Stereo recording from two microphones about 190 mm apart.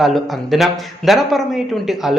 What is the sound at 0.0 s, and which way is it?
Speech, centre (ahead or behind).